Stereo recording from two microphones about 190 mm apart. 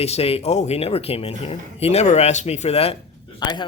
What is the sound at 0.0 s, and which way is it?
Speech, 30° left (ahead or behind).